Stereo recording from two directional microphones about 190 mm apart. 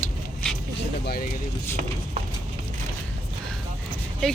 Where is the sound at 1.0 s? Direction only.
55° left (ahead or behind).